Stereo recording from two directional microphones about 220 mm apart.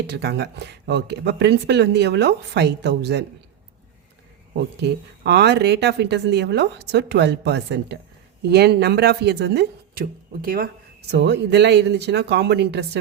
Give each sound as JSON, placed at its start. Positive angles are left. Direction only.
{"t": 0.1, "sound": "speech", "side_deg": -50}
{"t": 4.5, "sound": "speech", "side_deg": -50}